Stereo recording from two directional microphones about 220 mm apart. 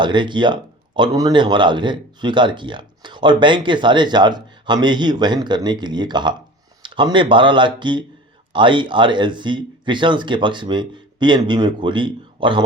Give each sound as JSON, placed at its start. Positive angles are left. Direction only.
{"t": 0.0, "sound": "a man's voice", "side_deg": -20}